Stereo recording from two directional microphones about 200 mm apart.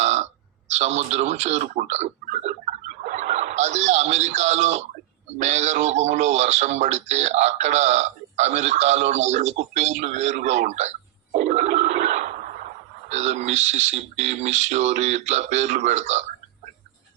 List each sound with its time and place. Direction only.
0.0 s a sound: 35° right (ahead or behind)
0.7 s speech: 35° right (ahead or behind)
11.3 s toilet flush: 35° right (ahead or behind)
13.1 s speech: 35° right (ahead or behind)